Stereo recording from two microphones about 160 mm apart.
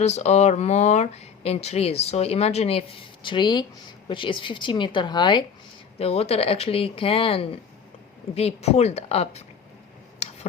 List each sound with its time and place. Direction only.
0.0 s speech: 45° left (ahead or behind); by 5.5 s 30° left (ahead or behind)
6.0 s speech: 40° left (ahead or behind)
10.2 s a sound: 40° left (ahead or behind)